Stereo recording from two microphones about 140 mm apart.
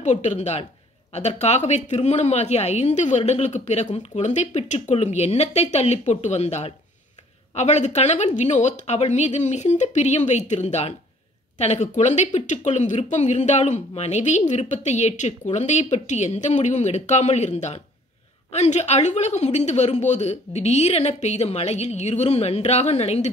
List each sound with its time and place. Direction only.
0.0 s speech: 60° left (ahead or behind)